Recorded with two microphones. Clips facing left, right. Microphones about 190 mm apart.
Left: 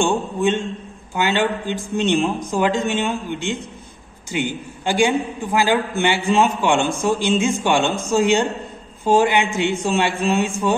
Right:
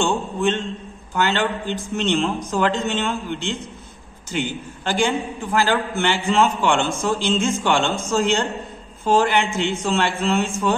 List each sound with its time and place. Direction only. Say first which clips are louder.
0.0 s a man's voice: left 2 dB; 15° left (ahead or behind)